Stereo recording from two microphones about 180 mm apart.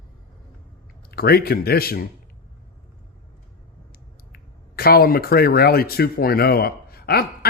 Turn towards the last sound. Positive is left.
turn(degrees=60)  # may be behind; listen again after turning